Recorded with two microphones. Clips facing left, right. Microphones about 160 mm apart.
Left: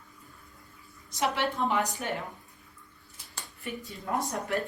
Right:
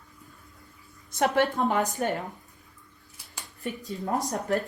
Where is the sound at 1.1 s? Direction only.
50° right (ahead or behind).